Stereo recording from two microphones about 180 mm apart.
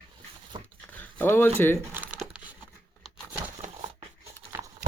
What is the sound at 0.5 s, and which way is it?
Dog, 25° right (ahead or behind).